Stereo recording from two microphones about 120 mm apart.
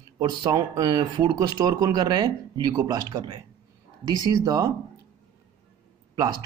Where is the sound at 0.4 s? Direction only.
30° right (ahead or behind).